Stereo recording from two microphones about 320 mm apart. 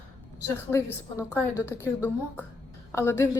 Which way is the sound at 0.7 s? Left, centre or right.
Centre.